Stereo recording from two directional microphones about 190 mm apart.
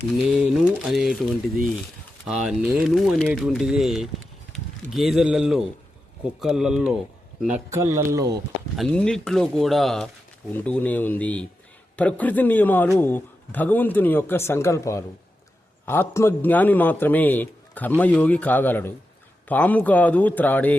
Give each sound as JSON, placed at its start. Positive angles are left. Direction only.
{"t": 0.3, "sound": "speech", "side_deg": -5}
{"t": 2.2, "sound": "speech", "side_deg": -5}
{"t": 8.7, "sound": "a man's voice", "side_deg": 5}